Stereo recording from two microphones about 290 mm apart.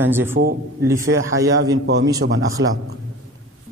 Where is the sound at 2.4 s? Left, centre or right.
Right.